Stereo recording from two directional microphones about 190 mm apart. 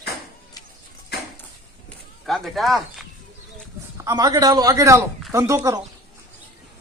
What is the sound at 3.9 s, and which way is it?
A man's voice, 20° right (ahead or behind).